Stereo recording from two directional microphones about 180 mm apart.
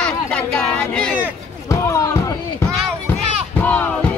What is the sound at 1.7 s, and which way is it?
Music, 15° left (ahead or behind).